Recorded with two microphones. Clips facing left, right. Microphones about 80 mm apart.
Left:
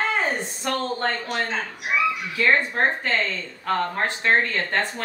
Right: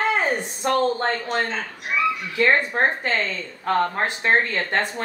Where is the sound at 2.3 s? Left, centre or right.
Right.